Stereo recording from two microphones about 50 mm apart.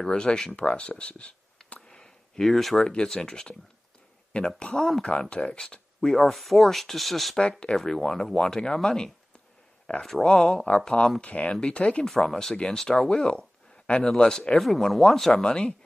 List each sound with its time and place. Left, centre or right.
0.0 s speech: centre
2.5 s speech: centre
2.8 s speech: centre
7.3 s speech: centre
9.9 s speech: left
10.2 s speech: centre
11.2 s speech: left
12.1 s speech: centre
15.4 s speech: centre